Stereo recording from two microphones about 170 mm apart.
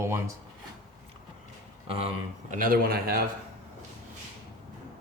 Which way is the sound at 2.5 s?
55° right (ahead or behind).